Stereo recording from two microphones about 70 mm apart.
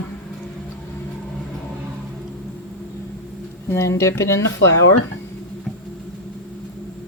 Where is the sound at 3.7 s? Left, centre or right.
Left.